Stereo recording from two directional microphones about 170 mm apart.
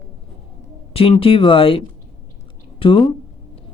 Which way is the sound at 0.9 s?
35° left (ahead or behind).